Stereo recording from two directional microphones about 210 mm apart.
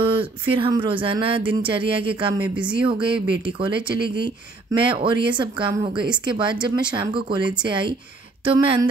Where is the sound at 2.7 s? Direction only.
25° right (ahead or behind).